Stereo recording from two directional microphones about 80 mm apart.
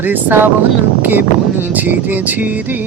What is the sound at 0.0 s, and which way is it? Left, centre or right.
Music, right.